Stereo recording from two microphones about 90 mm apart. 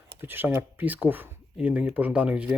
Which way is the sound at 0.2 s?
25° right (ahead or behind).